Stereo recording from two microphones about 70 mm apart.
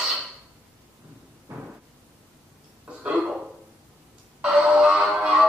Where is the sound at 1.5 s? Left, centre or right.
Right.